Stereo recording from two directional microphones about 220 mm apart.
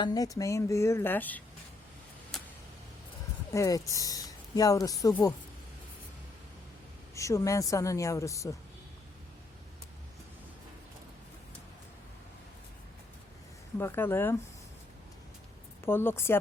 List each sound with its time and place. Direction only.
0.0 s speech: 15° left (ahead or behind)
3.5 s speech: 15° left (ahead or behind)
7.2 s speech: 15° left (ahead or behind)
13.7 s speech: 10° left (ahead or behind)
15.9 s speech: 10° left (ahead or behind)